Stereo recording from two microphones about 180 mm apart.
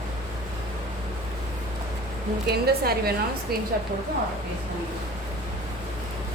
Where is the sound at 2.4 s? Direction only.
60° right (ahead or behind).